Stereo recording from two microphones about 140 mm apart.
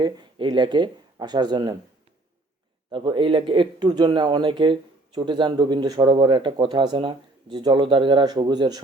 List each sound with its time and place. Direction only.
0.0 s speech: 30° right (ahead or behind)
2.9 s speech: 35° right (ahead or behind)